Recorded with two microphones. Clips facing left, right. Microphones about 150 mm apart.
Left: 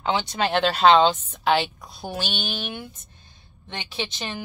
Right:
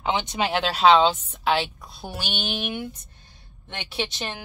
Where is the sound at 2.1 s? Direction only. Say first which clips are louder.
Even; 15° right (ahead or behind).